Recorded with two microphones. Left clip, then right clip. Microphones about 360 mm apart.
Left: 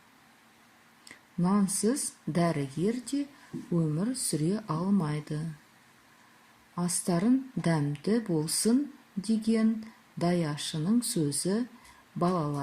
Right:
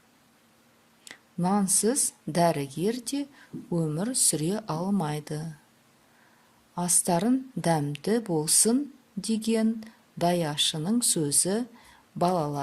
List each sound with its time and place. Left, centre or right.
1.0 s speech: right
6.7 s speech: right